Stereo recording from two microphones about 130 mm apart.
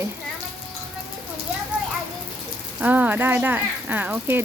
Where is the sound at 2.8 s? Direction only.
10° right (ahead or behind).